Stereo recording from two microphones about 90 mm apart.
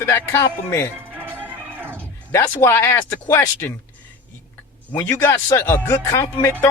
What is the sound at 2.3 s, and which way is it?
Speech, 30° left (ahead or behind).